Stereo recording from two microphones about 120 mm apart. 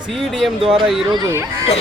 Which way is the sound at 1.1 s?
25° right (ahead or behind).